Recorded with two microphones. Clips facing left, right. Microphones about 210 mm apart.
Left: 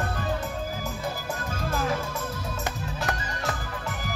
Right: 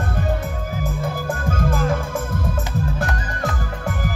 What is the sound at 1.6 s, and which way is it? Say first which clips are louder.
Music: right 5 dB; 50° right (ahead or behind).